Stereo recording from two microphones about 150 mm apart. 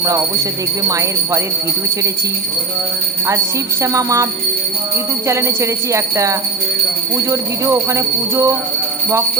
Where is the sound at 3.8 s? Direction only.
20° right (ahead or behind).